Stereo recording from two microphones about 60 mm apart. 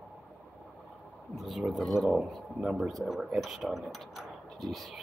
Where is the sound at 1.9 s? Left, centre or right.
Centre.